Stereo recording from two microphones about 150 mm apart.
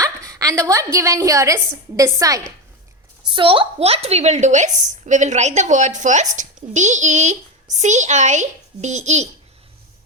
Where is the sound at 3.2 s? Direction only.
35° right (ahead or behind).